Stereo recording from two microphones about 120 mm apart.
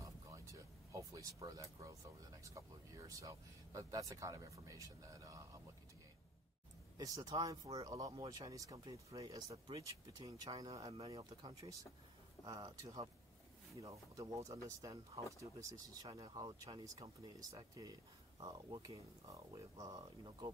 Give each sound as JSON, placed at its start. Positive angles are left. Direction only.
{"t": 0.0, "sound": "speech", "side_deg": -25}
{"t": 7.0, "sound": "speech", "side_deg": -30}
{"t": 13.7, "sound": "speech", "side_deg": -25}